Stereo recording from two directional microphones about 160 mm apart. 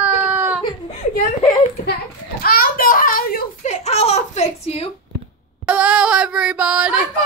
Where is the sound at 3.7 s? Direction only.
45° left (ahead or behind).